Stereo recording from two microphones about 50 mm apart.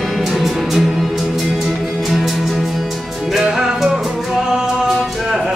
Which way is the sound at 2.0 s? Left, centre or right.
Centre.